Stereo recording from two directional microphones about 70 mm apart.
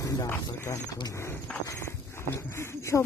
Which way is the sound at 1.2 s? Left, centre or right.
Left.